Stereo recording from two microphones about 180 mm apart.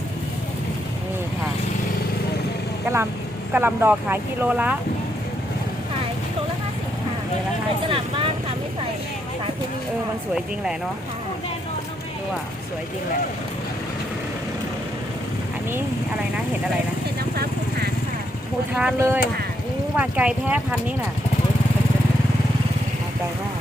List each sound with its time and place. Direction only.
3.5 s speech: 10° right (ahead or behind)
7.9 s speech: 30° right (ahead or behind)
17.3 s vehicle: 60° right (ahead or behind)
18.7 s speech: 5° right (ahead or behind)